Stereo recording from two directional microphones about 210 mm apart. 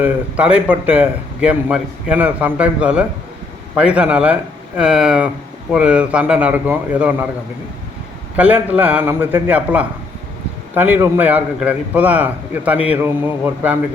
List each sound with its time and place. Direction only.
0.0 s a man's voice: 5° right (ahead or behind)
8.4 s speech: 5° right (ahead or behind)